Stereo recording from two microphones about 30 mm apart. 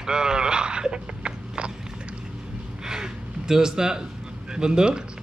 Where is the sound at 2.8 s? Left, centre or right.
Right.